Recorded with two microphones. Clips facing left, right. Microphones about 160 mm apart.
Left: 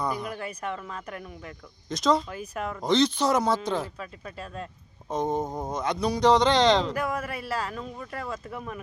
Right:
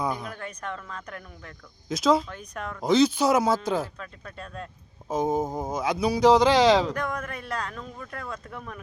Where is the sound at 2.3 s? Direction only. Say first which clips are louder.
Left 3 dB; 5° left (ahead or behind).